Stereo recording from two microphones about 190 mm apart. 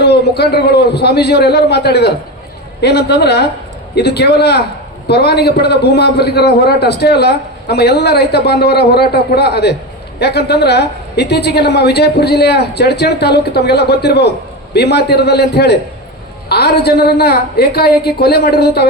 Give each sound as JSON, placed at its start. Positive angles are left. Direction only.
{"t": 0.0, "sound": "a woman's voice", "side_deg": 60}